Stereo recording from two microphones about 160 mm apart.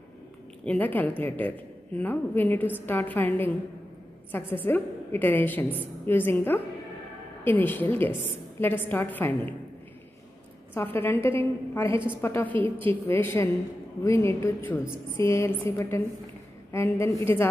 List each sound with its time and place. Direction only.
0.7 s a woman's voice: 10° left (ahead or behind)
10.7 s a woman's voice: 15° left (ahead or behind)